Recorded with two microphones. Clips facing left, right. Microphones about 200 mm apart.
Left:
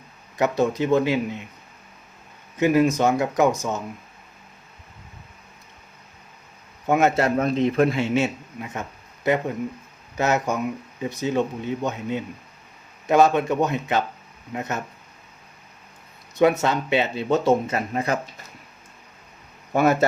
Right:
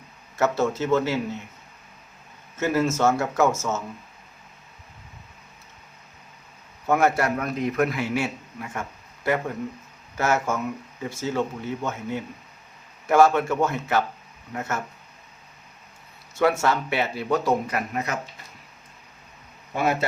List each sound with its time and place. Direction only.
0.3 s speech: 15° left (ahead or behind)
2.6 s speech: 15° left (ahead or behind)
6.8 s a man's voice: 20° left (ahead or behind)
16.3 s a man's voice: 20° left (ahead or behind)
19.7 s a man's voice: 45° left (ahead or behind)